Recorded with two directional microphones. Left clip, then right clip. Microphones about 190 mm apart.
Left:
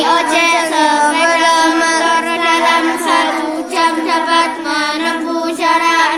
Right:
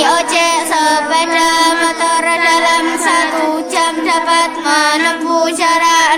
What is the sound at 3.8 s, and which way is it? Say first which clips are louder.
Music: left 1 dB; 30° right (ahead or behind).